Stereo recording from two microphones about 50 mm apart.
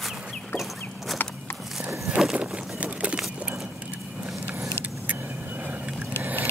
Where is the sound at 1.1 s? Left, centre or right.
Left.